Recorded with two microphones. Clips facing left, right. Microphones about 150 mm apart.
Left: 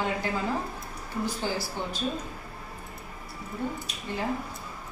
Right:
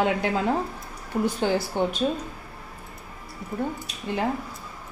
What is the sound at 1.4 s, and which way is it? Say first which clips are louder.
Speech: right 7 dB; 60° right (ahead or behind).